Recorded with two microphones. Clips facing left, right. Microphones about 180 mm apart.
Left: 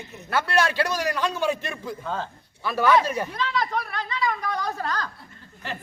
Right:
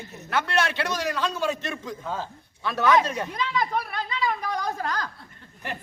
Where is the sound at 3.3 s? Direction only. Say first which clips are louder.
Even; 15° right (ahead or behind).